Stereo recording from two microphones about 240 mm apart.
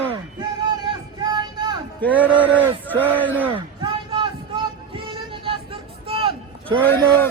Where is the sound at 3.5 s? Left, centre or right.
Right.